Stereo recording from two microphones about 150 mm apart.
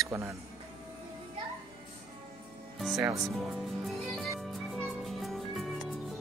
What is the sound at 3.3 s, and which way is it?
Music, centre (ahead or behind).